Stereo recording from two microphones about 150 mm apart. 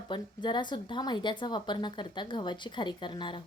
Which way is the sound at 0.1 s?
30° left (ahead or behind).